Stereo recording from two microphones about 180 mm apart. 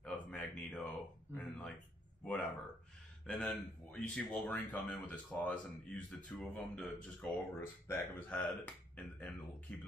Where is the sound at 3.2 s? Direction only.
5° left (ahead or behind).